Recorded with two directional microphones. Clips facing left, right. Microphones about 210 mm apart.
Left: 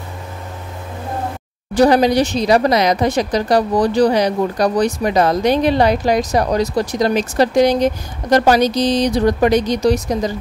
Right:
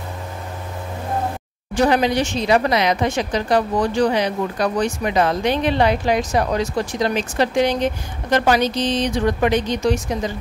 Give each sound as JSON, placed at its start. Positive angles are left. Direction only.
{"t": 1.7, "sound": "speech", "side_deg": 35}